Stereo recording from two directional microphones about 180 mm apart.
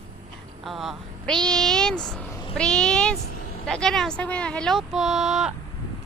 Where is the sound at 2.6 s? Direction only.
5° left (ahead or behind).